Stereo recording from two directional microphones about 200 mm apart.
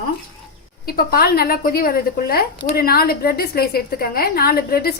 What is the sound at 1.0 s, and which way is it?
A woman's voice, 50° left (ahead or behind).